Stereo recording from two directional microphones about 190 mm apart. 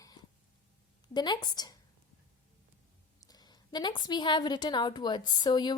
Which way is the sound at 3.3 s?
20° left (ahead or behind).